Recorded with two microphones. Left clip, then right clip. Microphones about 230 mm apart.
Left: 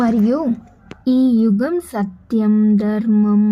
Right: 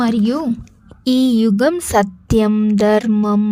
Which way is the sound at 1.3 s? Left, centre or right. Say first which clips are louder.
Right 3 dB; right.